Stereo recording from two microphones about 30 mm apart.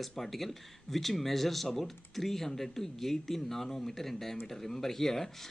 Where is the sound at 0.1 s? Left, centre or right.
Centre.